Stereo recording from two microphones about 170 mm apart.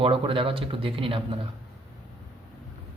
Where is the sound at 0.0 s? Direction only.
30° right (ahead or behind).